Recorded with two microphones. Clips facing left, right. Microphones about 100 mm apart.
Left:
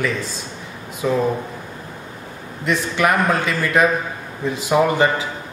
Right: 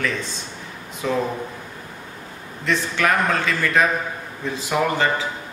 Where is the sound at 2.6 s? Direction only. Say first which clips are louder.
Left 3 dB; 15° left (ahead or behind).